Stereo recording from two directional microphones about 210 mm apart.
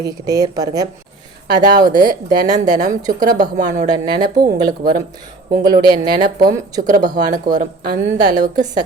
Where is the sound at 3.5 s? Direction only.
35° right (ahead or behind).